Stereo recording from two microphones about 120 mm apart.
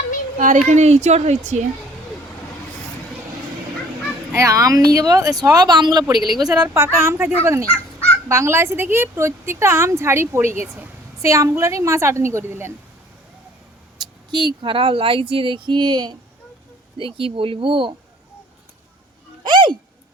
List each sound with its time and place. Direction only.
0.3 s a woman's voice: 90° right
4.4 s speech: 25° right (ahead or behind)
6.7 s a woman's voice: 20° right (ahead or behind)
14.0 s speech: 40° right (ahead or behind)
17.0 s speech: 50° right (ahead or behind)
19.5 s hiccup: 40° right (ahead or behind)